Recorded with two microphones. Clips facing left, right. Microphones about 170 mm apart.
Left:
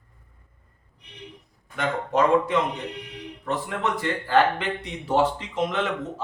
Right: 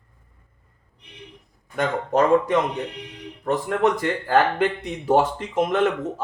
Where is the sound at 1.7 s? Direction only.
45° right (ahead or behind).